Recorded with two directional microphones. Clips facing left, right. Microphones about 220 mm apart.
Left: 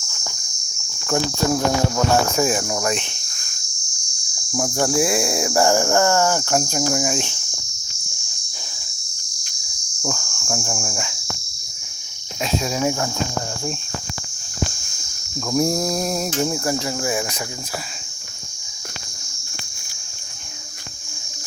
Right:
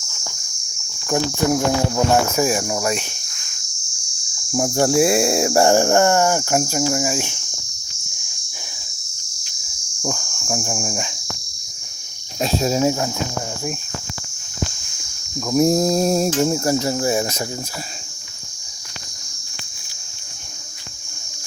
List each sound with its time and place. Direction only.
1.0 s cricket: 15° right (ahead or behind)
4.5 s cricket: 25° right (ahead or behind); by 7.3 s 5° right (ahead or behind)
10.0 s insect: 15° right (ahead or behind)
12.4 s cricket: 35° right (ahead or behind)
15.5 s cricket: 20° right (ahead or behind); by 17.4 s 40° right (ahead or behind)